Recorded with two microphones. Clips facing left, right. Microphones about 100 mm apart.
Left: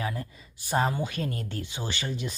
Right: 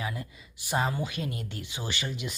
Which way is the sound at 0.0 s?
35° left (ahead or behind).